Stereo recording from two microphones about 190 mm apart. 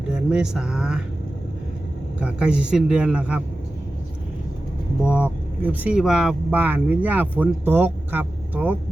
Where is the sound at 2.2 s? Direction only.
5° right (ahead or behind).